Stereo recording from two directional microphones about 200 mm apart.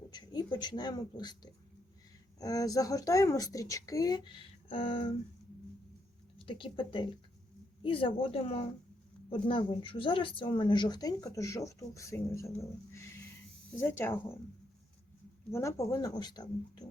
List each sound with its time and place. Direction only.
0.1 s speech: 20° left (ahead or behind)
6.4 s speech: 25° left (ahead or behind)
15.5 s speech: 15° left (ahead or behind)